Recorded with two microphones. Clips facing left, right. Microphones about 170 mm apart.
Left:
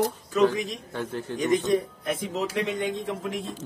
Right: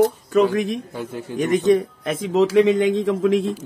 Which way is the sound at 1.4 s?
80° right.